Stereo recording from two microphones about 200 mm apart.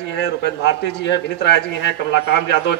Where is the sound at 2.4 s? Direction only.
60° left (ahead or behind).